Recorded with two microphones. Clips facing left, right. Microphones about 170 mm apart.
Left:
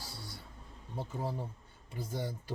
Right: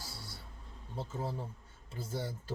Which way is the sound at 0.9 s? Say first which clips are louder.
Left 1 dB; 15° left (ahead or behind).